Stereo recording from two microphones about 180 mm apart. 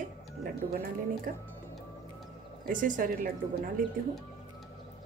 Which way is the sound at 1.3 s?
50° right (ahead or behind).